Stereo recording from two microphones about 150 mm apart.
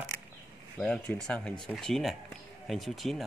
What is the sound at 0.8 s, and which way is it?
Speech, 5° left (ahead or behind).